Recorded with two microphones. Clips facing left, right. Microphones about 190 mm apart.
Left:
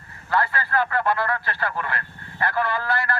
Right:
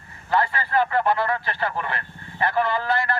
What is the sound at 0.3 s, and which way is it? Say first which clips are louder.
Speech: right 1 dB; 20° right (ahead or behind).